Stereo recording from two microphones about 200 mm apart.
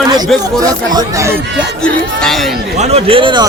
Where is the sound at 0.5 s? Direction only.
20° right (ahead or behind).